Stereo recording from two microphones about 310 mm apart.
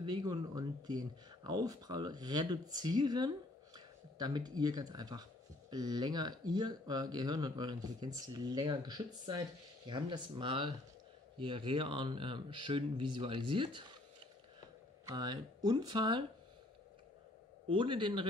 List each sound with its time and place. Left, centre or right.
0.0 s speech: centre
15.0 s speech: centre
17.6 s speech: centre